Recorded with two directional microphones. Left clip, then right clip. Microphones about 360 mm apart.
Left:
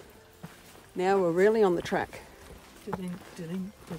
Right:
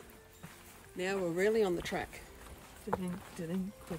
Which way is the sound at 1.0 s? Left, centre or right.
Centre.